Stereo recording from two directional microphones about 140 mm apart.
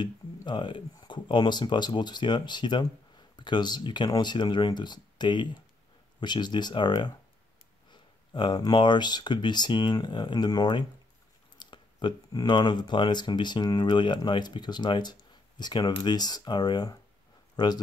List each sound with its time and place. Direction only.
0.5 s speech: 35° left (ahead or behind)